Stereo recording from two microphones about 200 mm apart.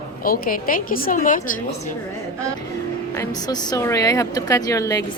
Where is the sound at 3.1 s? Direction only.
15° left (ahead or behind).